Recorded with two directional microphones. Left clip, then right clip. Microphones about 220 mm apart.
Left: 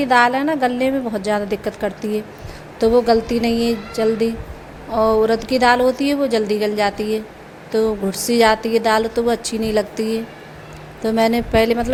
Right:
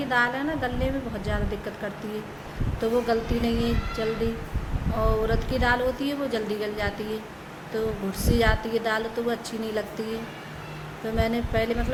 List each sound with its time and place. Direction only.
0.0 s a woman's voice: 35° left (ahead or behind)